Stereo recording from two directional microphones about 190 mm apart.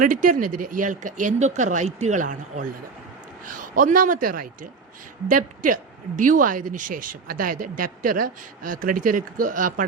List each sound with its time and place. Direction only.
0.0 s a woman's voice: 45° right (ahead or behind)